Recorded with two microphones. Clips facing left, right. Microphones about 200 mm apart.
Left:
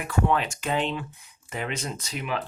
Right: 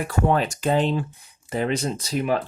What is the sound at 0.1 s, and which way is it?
Speech, 40° right (ahead or behind).